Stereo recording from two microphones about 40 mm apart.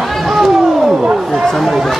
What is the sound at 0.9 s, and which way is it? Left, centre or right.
Speech, centre.